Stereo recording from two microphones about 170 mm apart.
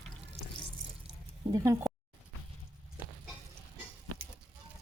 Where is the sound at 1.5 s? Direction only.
20° right (ahead or behind).